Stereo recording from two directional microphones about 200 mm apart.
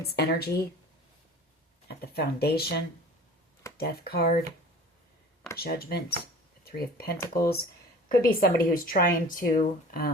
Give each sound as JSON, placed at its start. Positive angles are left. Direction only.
{"t": 0.2, "sound": "a woman's voice", "side_deg": 55}
{"t": 1.9, "sound": "a woman's voice", "side_deg": 55}
{"t": 5.5, "sound": "a woman's voice", "side_deg": 50}